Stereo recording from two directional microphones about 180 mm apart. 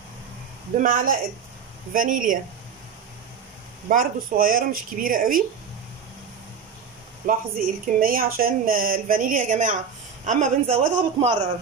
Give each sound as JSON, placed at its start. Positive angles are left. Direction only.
{"t": 0.7, "sound": "a woman's voice", "side_deg": -50}
{"t": 3.9, "sound": "a woman's voice", "side_deg": -50}
{"t": 7.2, "sound": "a woman's voice", "side_deg": -55}